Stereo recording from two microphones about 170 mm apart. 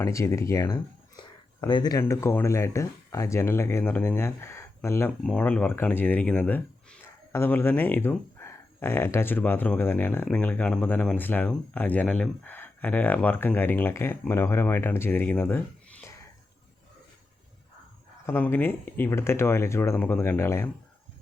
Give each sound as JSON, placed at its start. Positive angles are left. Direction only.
{"t": 0.0, "sound": "speech", "side_deg": 15}
{"t": 5.2, "sound": "speech", "side_deg": 5}
{"t": 18.3, "sound": "speech", "side_deg": 10}